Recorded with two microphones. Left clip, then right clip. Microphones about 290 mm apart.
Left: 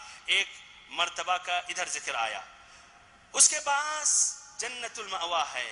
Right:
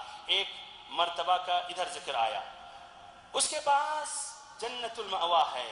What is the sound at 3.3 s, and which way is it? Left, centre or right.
A man's voice, left.